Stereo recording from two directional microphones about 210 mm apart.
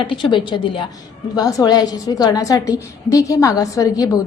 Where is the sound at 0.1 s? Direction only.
20° left (ahead or behind).